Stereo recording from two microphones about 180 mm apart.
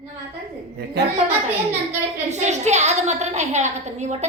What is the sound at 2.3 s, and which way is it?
A woman's voice, 40° right (ahead or behind).